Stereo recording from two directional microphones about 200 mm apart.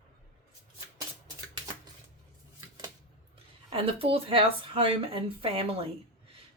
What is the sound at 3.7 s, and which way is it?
A woman's voice, 25° right (ahead or behind).